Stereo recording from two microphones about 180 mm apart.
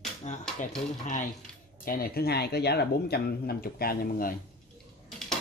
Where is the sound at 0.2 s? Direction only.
40° left (ahead or behind).